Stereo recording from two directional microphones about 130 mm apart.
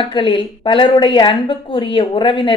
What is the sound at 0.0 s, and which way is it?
Speech, 40° left (ahead or behind).